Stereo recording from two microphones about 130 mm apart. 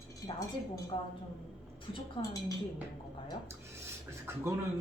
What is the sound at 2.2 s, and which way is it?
Speech, 40° left (ahead or behind).